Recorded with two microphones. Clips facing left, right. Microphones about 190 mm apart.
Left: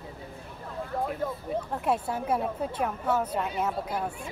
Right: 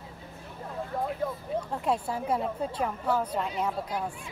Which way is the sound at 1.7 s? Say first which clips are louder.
Left 1 dB; 5° left (ahead or behind).